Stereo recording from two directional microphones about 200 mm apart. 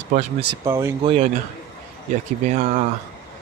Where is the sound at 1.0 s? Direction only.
30° right (ahead or behind).